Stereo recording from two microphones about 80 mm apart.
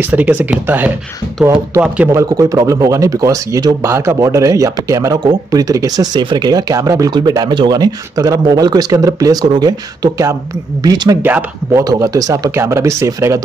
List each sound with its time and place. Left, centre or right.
0.0 s speech: centre
2.1 s speech: right
6.2 s speech: right
7.1 s speech: right
12.5 s speech: right